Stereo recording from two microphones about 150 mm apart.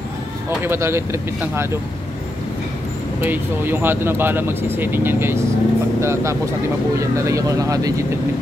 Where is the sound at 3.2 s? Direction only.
15° right (ahead or behind).